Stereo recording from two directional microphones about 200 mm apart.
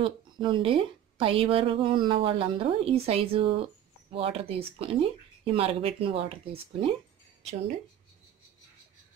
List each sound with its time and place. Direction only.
0.0 s a woman's voice: 25° right (ahead or behind)